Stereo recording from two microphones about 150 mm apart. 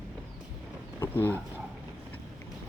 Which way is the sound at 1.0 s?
15° left (ahead or behind).